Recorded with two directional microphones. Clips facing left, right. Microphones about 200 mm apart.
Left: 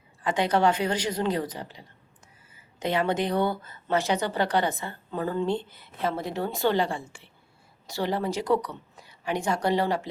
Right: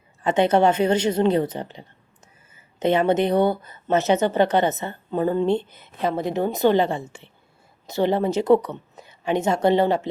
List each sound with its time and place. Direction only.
0.2 s a woman's voice: 25° right (ahead or behind)